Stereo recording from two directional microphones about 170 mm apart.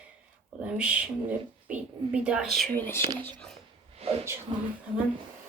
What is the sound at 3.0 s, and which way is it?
Speech, 30° right (ahead or behind).